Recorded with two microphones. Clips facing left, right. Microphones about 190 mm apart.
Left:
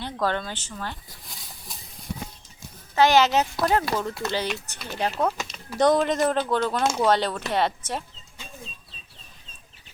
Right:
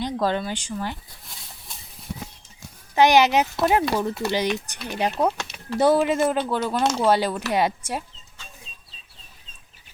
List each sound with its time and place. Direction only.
0.0 s speech: 15° right (ahead or behind)
1.2 s a sound: centre (ahead or behind)
2.9 s speech: 15° right (ahead or behind)